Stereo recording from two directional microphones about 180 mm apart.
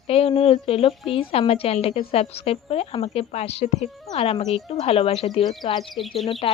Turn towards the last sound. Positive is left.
turn(degrees=30)  # may be behind; listen again after turning